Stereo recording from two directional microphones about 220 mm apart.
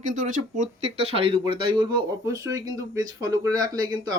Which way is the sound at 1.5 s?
25° right (ahead or behind).